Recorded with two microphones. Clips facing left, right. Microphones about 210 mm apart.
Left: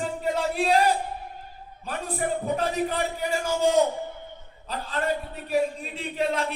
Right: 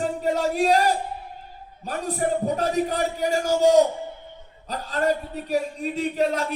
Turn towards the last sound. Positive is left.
turn(degrees=-40)  # may be behind; listen again after turning